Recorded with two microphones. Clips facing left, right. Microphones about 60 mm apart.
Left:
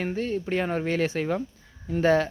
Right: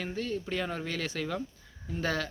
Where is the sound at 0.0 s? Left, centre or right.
Left.